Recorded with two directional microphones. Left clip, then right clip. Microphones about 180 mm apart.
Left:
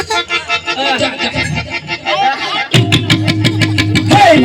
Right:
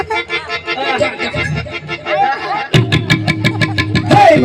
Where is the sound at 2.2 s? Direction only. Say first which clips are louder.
Left 2 dB; 30° right (ahead or behind).